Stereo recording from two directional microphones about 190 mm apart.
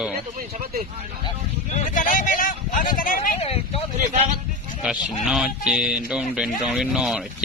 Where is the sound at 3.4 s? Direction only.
30° left (ahead or behind).